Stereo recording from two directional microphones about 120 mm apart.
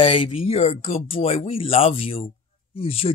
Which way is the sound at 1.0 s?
55° left (ahead or behind).